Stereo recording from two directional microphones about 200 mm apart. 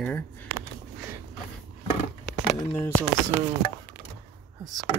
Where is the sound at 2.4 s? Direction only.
10° left (ahead or behind).